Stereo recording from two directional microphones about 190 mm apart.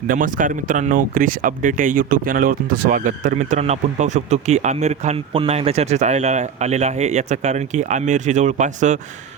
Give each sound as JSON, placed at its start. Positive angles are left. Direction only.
{"t": 0.1, "sound": "speech", "side_deg": -45}